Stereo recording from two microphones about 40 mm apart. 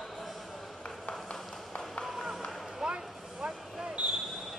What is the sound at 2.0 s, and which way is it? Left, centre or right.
Run, centre.